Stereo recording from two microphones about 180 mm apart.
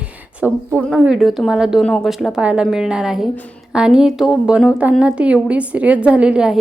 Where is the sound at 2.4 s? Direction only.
5° right (ahead or behind).